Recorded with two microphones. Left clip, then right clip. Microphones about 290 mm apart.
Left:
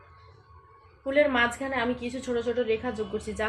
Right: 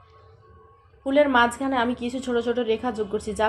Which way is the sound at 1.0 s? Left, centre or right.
Right.